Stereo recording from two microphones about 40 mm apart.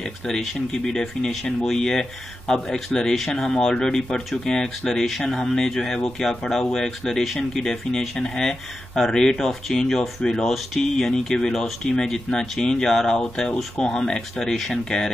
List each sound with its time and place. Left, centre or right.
1.7 s speech: centre